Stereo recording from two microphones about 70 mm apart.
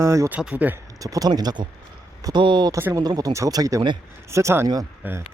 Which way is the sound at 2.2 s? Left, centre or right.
Right.